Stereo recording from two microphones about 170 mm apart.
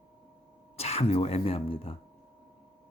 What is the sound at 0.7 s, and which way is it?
Speech, 35° left (ahead or behind).